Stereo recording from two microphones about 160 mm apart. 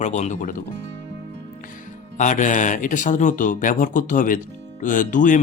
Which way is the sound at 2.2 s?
50° left (ahead or behind).